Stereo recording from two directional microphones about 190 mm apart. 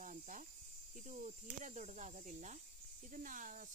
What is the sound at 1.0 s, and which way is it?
Speech, 40° right (ahead or behind).